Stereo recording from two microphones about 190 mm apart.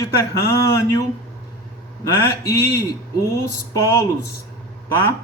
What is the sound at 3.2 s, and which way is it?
Speech, 15° left (ahead or behind).